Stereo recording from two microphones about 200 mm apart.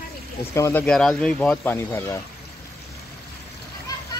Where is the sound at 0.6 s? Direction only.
10° left (ahead or behind).